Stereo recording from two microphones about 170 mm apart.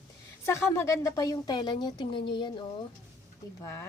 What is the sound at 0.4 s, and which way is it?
A woman's voice, 15° left (ahead or behind).